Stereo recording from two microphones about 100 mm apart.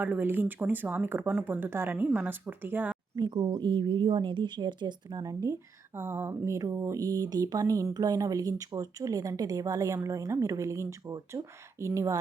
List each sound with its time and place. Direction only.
0.0 s speech: 15° right (ahead or behind)
3.2 s a woman's voice: 45° right (ahead or behind)
6.0 s speech: 25° right (ahead or behind)